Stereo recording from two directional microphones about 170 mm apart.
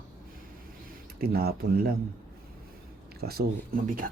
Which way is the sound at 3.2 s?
65° right (ahead or behind).